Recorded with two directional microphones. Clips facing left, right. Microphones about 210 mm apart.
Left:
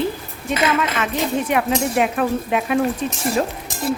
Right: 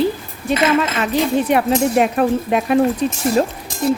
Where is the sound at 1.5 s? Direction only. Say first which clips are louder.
Right 4 dB; 35° right (ahead or behind).